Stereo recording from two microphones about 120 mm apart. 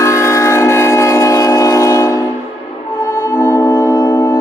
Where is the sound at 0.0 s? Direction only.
25° left (ahead or behind).